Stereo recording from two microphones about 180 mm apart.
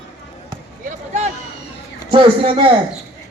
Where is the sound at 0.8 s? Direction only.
40° right (ahead or behind).